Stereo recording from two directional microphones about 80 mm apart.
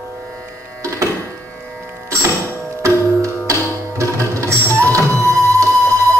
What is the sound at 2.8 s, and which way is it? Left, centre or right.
Music, right.